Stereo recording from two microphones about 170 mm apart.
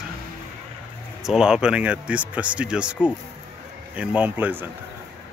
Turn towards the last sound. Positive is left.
turn(degrees=-10)  # may be behind; listen again after turning